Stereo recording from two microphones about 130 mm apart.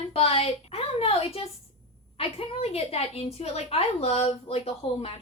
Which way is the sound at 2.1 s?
50° left (ahead or behind).